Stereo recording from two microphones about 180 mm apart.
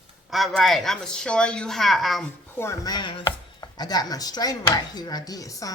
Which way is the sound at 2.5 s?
15° left (ahead or behind).